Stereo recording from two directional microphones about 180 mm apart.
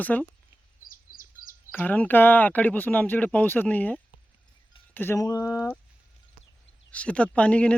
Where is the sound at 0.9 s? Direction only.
50° left (ahead or behind).